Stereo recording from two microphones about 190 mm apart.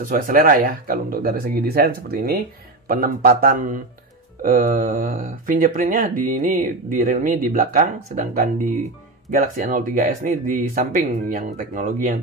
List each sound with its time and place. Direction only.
0.0 s speech: 45° right (ahead or behind)